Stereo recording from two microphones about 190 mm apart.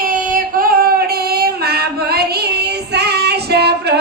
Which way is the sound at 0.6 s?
50° right (ahead or behind).